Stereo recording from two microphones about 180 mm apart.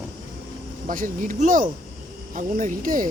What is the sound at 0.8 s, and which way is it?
Speech, 45° right (ahead or behind).